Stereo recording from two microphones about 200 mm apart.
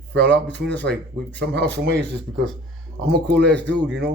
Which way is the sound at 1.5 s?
55° right (ahead or behind).